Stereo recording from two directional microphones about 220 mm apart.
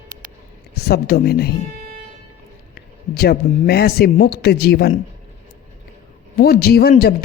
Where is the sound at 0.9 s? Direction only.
45° left (ahead or behind).